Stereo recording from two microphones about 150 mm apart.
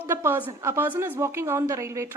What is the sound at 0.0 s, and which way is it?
A woman's voice, 15° right (ahead or behind).